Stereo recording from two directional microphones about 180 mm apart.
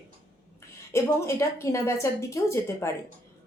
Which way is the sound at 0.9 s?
15° left (ahead or behind).